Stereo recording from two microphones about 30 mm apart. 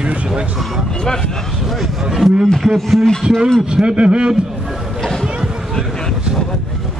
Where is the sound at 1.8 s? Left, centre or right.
Centre.